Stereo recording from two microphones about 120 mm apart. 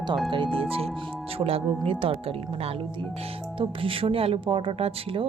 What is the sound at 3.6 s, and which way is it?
Speech, 50° right (ahead or behind).